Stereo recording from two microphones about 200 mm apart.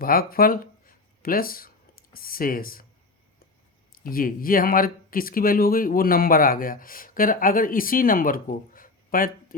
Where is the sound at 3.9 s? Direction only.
45° left (ahead or behind).